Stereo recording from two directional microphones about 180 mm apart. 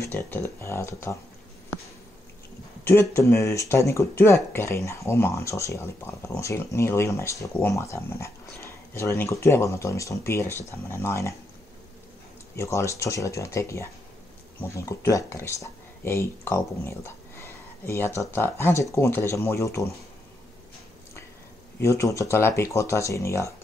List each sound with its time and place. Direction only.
0.0 s speech: 15° left (ahead or behind)
2.8 s speech: 15° left (ahead or behind)
12.5 s speech: 15° left (ahead or behind)
21.7 s speech: 15° left (ahead or behind)